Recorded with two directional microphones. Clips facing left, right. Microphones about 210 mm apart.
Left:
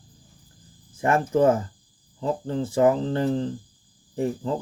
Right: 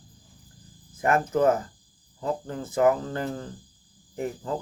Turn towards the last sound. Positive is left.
turn(degrees=25)  # may be behind; listen again after turning